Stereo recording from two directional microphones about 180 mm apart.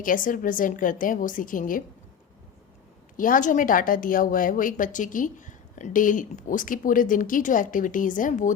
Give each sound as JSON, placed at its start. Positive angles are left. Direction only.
{"t": 0.0, "sound": "a woman's voice", "side_deg": 50}
{"t": 3.2, "sound": "a woman's voice", "side_deg": 50}